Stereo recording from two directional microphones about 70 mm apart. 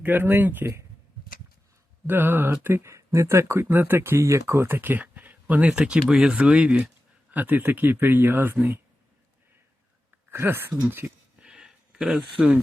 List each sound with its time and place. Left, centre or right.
0.0 s speech: right
0.6 s speech: right
2.0 s speech: right
10.3 s speech: right
11.3 s a sound: centre